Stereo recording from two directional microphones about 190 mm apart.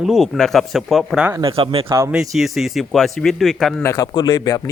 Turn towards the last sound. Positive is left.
turn(degrees=20)  # may be behind; listen again after turning